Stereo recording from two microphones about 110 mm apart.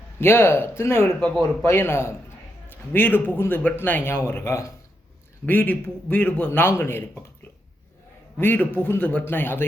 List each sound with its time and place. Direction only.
0.2 s a man's voice: 20° left (ahead or behind)
8.4 s a man's voice: 15° left (ahead or behind)